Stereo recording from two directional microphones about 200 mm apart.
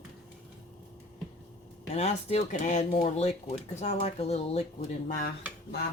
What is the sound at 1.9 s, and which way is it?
Speech, 30° left (ahead or behind).